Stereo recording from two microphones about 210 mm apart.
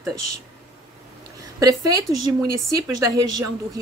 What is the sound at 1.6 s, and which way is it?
A woman's voice, 15° right (ahead or behind).